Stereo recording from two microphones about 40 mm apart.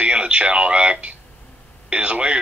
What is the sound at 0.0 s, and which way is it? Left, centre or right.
Speech, right.